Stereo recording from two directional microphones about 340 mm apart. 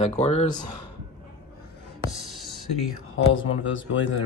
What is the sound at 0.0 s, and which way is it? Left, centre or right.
Speech, centre.